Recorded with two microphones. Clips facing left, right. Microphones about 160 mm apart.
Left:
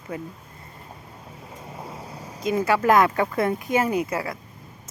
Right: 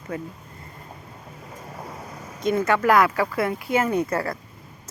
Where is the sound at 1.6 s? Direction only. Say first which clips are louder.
Even; 5° left (ahead or behind).